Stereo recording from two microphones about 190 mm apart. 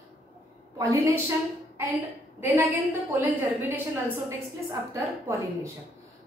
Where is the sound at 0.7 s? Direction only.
15° right (ahead or behind).